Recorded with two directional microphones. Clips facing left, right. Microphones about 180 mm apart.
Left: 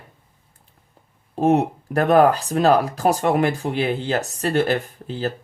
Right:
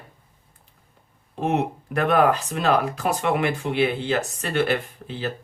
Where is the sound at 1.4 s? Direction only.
40° left (ahead or behind).